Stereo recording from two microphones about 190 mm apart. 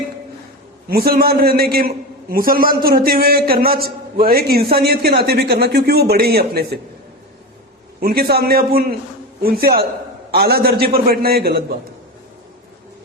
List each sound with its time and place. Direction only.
0.9 s a man's voice: 50° right (ahead or behind)
8.0 s a man's voice: 55° right (ahead or behind)